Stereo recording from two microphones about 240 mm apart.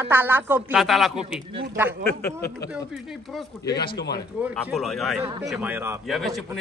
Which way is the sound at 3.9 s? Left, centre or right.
Left.